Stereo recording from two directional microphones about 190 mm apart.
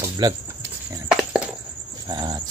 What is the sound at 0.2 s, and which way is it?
Speech, 20° right (ahead or behind).